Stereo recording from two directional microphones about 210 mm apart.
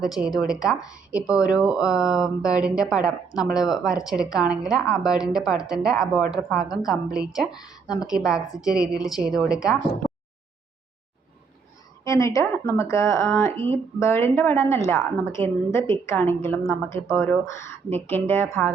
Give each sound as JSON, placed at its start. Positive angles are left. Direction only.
{"t": 0.0, "sound": "speech", "side_deg": 0}
{"t": 7.5, "sound": "speech", "side_deg": 20}
{"t": 8.0, "sound": "speech", "side_deg": 0}
{"t": 12.0, "sound": "speech", "side_deg": 15}